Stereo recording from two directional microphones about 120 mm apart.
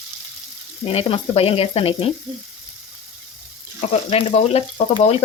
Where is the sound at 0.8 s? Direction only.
55° left (ahead or behind).